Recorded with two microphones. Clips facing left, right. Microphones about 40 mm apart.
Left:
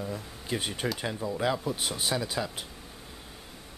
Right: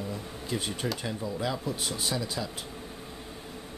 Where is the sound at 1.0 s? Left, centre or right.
Left.